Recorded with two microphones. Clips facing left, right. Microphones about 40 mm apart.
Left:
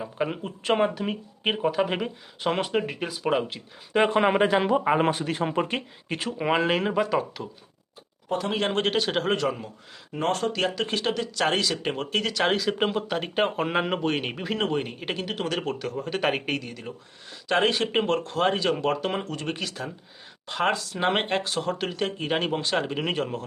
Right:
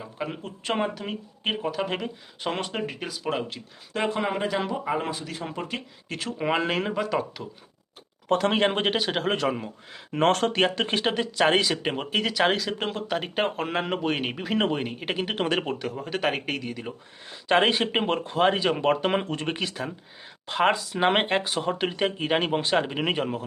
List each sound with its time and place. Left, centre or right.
0.0 s speech: centre
3.9 s speech: left
6.1 s speech: centre
8.3 s speech: right
8.5 s speech: right
8.8 s speech: centre
10.2 s speech: right
10.5 s speech: right; by 15.2 s centre
15.2 s speech: right
15.6 s speech: centre
17.5 s speech: right
18.8 s speech: right; by 23.4 s centre